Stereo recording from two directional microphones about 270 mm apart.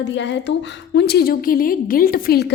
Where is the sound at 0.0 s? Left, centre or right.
Left.